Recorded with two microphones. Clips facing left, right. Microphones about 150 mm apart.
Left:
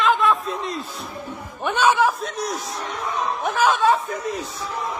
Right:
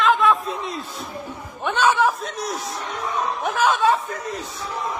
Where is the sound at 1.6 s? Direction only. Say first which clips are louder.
Even; 10° left (ahead or behind).